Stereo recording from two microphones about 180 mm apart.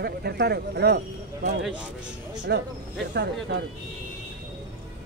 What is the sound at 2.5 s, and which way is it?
Speech, 65° right (ahead or behind).